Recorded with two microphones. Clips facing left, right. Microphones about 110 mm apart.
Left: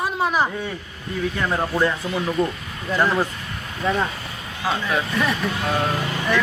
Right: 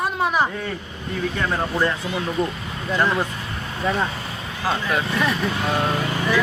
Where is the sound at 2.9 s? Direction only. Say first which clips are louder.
Left 1 dB; 5° left (ahead or behind).